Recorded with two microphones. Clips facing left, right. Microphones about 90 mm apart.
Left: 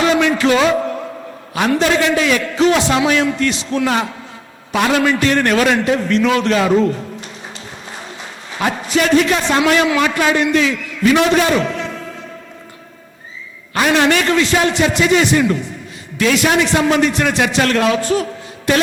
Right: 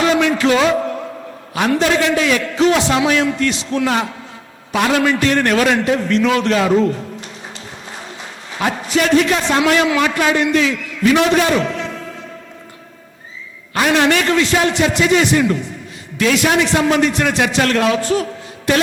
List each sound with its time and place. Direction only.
0.0 s a sound: 25° left (ahead or behind)
1.5 s a man's voice: 25° left (ahead or behind)
13.7 s a man's voice: 20° left (ahead or behind)